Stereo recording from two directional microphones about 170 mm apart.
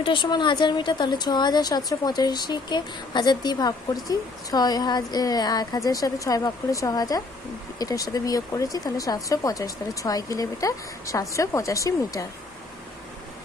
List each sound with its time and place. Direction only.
0.0 s speech: 30° left (ahead or behind)